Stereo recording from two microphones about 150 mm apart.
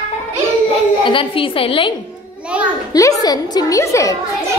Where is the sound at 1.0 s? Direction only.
35° left (ahead or behind).